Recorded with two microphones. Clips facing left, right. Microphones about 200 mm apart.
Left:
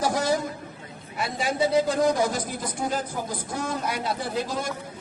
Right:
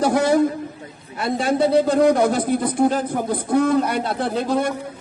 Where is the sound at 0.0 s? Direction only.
60° right (ahead or behind).